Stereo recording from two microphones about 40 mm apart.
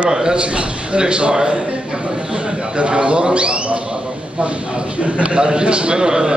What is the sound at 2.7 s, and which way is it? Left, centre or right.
A man's voice, right.